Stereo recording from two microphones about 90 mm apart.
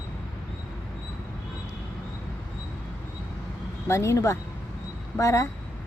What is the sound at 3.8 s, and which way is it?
Speech, 30° left (ahead or behind).